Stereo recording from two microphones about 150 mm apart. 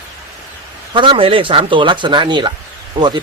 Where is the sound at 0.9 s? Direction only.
35° right (ahead or behind).